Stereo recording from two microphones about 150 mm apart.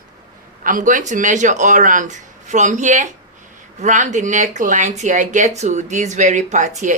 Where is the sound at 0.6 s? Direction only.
65° right (ahead or behind).